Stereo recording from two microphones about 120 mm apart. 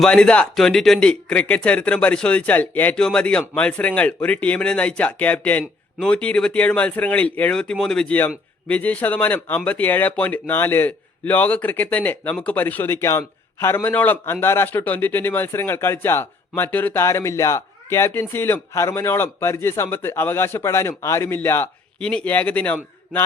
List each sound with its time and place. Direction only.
0.0 s speech: 10° left (ahead or behind)